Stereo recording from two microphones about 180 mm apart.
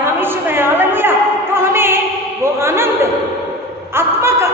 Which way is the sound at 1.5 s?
15° right (ahead or behind).